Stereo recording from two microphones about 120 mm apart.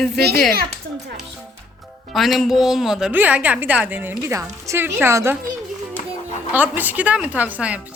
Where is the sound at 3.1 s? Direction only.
15° right (ahead or behind).